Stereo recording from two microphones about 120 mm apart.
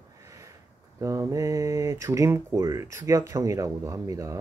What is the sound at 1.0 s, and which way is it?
Speech, 25° right (ahead or behind).